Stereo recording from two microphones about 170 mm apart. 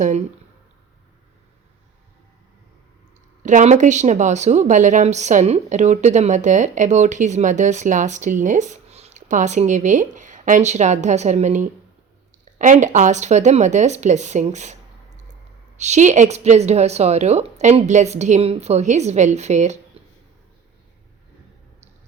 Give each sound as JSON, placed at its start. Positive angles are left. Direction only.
{"t": 3.4, "sound": "a woman's voice", "side_deg": -45}